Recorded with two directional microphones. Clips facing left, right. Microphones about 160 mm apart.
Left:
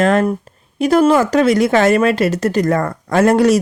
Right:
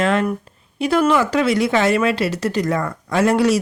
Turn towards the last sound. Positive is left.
turn(degrees=45)  # may be behind; listen again after turning